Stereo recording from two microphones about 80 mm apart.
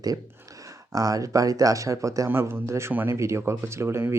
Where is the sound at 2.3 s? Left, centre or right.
Right.